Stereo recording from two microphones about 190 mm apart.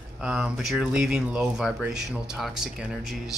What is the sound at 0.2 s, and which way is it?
Speech, 5° right (ahead or behind).